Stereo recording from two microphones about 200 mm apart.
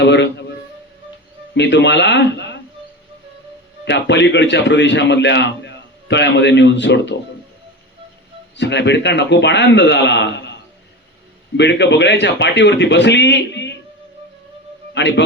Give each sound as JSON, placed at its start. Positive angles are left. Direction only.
{"t": 0.0, "sound": "a sound", "side_deg": 60}
{"t": 1.5, "sound": "a man's voice", "side_deg": 60}
{"t": 3.8, "sound": "a man's voice", "side_deg": 60}
{"t": 8.5, "sound": "a man's voice", "side_deg": 60}
{"t": 11.5, "sound": "a man's voice", "side_deg": 60}
{"t": 14.9, "sound": "speech", "side_deg": 60}